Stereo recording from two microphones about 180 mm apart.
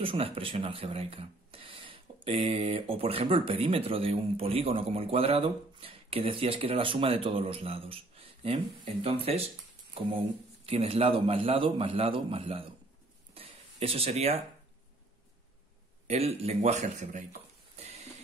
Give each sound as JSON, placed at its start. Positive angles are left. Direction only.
{"t": 0.0, "sound": "speech", "side_deg": -30}
{"t": 13.3, "sound": "a sound", "side_deg": -30}
{"t": 16.1, "sound": "speech", "side_deg": -35}